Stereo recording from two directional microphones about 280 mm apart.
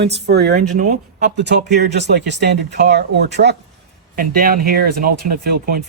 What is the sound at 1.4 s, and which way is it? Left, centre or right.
Speech, right.